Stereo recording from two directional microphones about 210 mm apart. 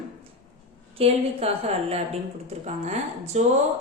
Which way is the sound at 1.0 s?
30° right (ahead or behind).